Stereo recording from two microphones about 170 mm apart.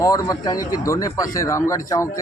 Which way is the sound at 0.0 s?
20° left (ahead or behind).